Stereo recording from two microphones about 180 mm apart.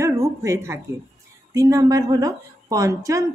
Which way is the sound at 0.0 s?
15° right (ahead or behind).